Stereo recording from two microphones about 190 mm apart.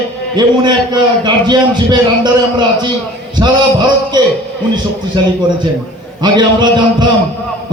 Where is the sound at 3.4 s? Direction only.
20° right (ahead or behind).